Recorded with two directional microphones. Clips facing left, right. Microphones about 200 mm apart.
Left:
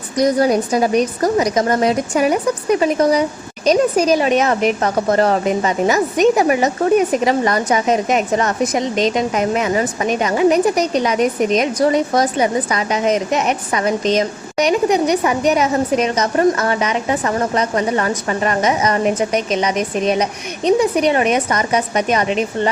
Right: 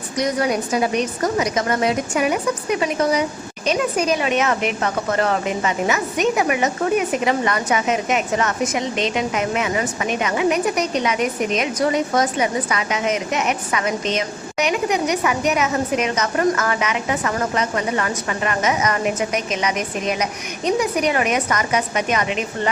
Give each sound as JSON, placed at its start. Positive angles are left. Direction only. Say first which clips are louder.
{"t": 0.2, "sound": "a woman's voice", "louder": "left 6 dB", "side_deg": 35}